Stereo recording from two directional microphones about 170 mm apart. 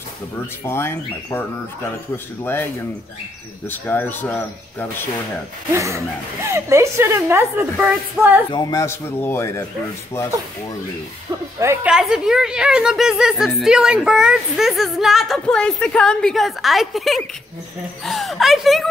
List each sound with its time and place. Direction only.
0.7 s speech: 15° left (ahead or behind)
2.4 s speech: 10° left (ahead or behind)
5.7 s a woman's voice: 15° right (ahead or behind)
8.5 s speech: 20° left (ahead or behind)
11.6 s a woman's voice: 15° right (ahead or behind)
11.9 s speech: 5° right (ahead or behind)